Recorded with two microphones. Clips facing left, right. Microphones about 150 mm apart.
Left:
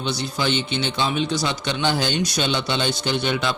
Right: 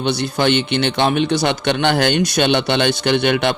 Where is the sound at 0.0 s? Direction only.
65° right (ahead or behind).